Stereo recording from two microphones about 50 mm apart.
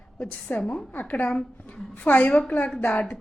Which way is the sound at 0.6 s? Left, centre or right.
Centre.